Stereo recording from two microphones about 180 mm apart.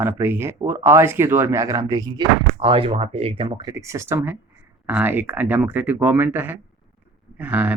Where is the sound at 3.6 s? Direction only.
15° right (ahead or behind).